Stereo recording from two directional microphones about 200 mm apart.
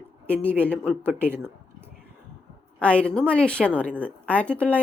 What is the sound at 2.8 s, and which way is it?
A woman's voice, 5° left (ahead or behind).